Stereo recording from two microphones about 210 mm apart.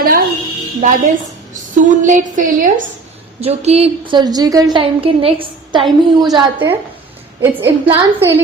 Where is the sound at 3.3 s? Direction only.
30° right (ahead or behind).